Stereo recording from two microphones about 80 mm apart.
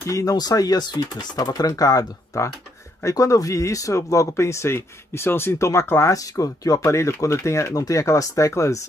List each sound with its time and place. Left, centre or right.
0.1 s speech: left